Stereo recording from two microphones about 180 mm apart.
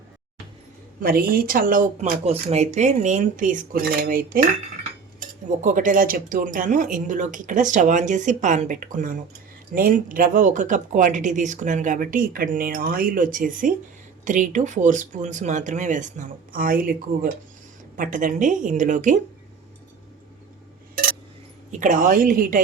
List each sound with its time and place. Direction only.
1.0 s speech: 55° right (ahead or behind)
5.6 s speech: 45° right (ahead or behind)
21.7 s speech: 45° right (ahead or behind)